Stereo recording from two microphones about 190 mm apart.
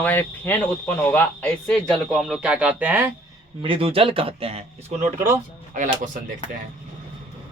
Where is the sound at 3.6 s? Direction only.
30° right (ahead or behind).